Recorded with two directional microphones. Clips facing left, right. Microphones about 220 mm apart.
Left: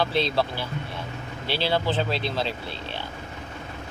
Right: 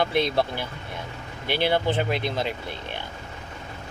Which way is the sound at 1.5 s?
15° right (ahead or behind).